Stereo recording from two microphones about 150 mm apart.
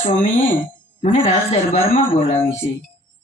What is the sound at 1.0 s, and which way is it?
A woman's voice, 40° left (ahead or behind).